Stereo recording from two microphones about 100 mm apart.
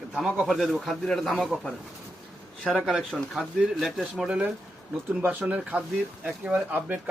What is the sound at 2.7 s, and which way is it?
Speech, 5° right (ahead or behind).